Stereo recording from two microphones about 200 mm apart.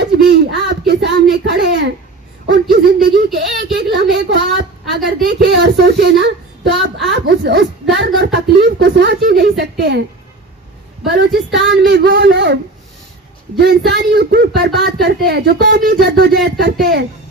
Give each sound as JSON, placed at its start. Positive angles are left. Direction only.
{"t": 0.0, "sound": "a sound", "side_deg": -55}
{"t": 2.5, "sound": "a woman's voice", "side_deg": -55}
{"t": 11.0, "sound": "a woman's voice", "side_deg": -55}
{"t": 13.6, "sound": "a woman's voice", "side_deg": -55}